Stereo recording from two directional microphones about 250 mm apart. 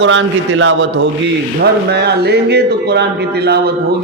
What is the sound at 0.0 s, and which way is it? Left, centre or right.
Speech, right.